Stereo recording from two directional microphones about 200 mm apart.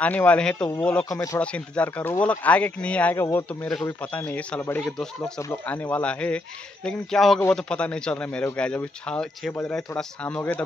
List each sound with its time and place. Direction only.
0.0 s a man's voice: 5° left (ahead or behind)
1.1 s a man's voice: 15° left (ahead or behind)